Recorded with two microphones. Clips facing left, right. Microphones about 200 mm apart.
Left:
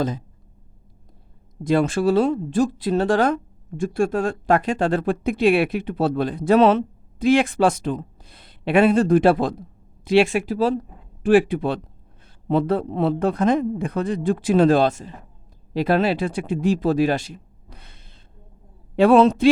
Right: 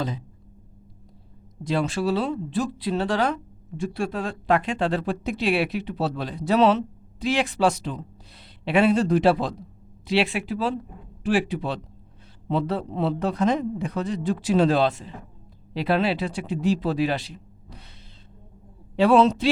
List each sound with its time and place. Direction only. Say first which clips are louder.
1.6 s speech: left 6 dB; 50° left (ahead or behind)
11.2 s speech: left 7 dB; 55° left (ahead or behind)
18.9 s speech: left 4 dB; 50° left (ahead or behind)